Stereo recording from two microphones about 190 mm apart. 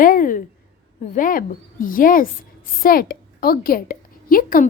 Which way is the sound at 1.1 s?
45° left (ahead or behind).